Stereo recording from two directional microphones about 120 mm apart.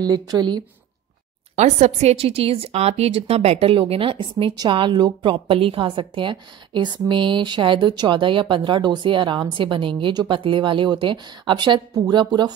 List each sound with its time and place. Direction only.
0.0 s speech: 35° right (ahead or behind)
1.5 s a woman's voice: 70° right (ahead or behind); by 12.5 s 35° right (ahead or behind)